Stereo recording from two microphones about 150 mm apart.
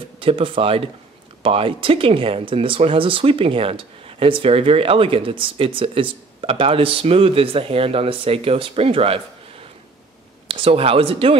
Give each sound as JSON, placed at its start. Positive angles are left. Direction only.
{"t": 0.2, "sound": "speech", "side_deg": -35}
{"t": 10.5, "sound": "speech", "side_deg": -40}